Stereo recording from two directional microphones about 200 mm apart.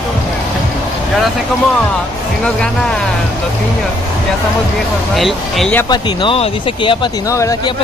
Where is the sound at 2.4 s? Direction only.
5° left (ahead or behind).